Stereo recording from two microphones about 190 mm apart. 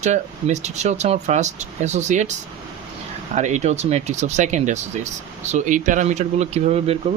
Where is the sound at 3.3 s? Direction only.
40° right (ahead or behind).